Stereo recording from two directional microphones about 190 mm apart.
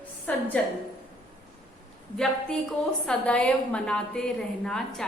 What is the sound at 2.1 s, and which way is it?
A woman's voice, 5° left (ahead or behind).